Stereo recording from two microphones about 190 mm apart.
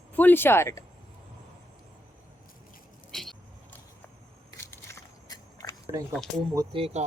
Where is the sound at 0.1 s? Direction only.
10° left (ahead or behind).